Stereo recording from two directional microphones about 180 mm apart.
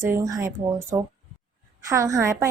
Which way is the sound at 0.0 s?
15° right (ahead or behind).